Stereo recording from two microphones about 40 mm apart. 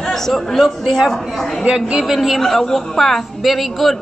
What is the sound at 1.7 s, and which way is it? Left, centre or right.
Speech, centre.